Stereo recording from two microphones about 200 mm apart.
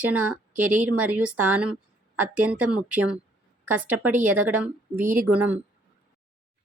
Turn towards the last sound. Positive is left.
turn(degrees=-5)  # may be behind; listen again after turning